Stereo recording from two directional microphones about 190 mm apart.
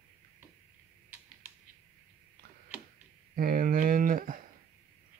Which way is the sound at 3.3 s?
50° right (ahead or behind).